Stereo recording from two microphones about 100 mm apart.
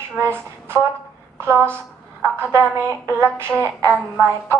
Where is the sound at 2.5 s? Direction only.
25° right (ahead or behind).